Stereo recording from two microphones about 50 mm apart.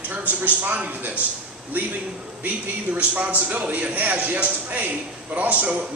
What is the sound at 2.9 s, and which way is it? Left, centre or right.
A man's voice, right.